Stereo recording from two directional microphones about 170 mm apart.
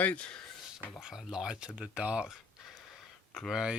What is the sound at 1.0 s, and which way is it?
Speech, 5° right (ahead or behind).